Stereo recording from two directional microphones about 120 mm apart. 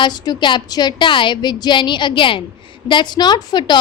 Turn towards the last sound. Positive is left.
turn(degrees=35)  # may be behind; listen again after turning